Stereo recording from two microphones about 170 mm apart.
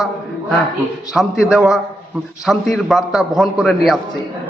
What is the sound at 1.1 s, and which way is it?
A man's voice, centre (ahead or behind).